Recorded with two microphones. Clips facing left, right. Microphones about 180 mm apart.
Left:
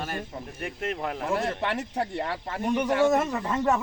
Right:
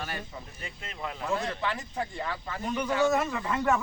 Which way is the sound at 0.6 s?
60° left (ahead or behind).